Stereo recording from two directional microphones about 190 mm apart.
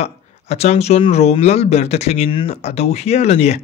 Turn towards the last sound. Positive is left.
turn(degrees=35)  # may be behind; listen again after turning